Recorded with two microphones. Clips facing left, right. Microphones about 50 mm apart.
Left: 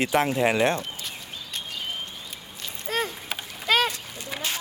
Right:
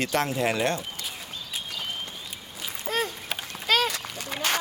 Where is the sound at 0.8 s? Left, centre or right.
Centre.